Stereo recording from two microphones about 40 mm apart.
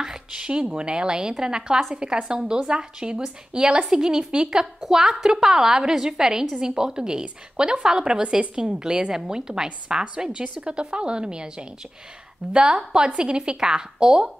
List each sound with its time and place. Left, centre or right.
0.0 s a sound: centre
0.7 s a woman's voice: right
4.8 s a woman's voice: centre